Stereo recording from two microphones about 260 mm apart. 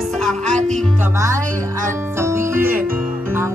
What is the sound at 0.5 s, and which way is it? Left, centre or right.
Music, right.